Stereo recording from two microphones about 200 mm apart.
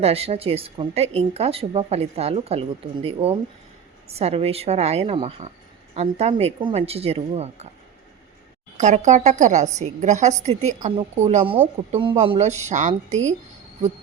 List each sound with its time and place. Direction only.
0.0 s a woman's voice: 30° right (ahead or behind)
8.8 s a woman's voice: 35° right (ahead or behind)